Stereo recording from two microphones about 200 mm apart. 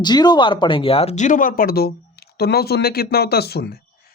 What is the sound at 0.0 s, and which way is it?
Speech, 20° left (ahead or behind).